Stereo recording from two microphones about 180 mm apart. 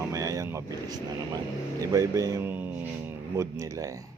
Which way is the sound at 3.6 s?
15° right (ahead or behind).